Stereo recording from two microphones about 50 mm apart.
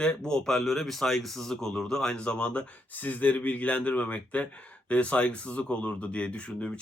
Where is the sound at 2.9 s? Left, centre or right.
Left.